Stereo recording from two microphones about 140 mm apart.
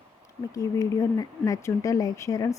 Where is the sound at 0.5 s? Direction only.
20° left (ahead or behind).